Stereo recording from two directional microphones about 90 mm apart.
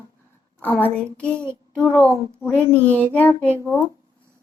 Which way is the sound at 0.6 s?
20° left (ahead or behind).